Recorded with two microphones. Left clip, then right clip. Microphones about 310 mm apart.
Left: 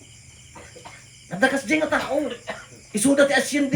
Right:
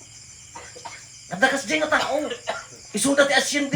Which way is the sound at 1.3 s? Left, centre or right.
Centre.